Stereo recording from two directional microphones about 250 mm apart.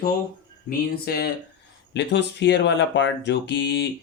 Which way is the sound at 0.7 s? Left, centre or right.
Left.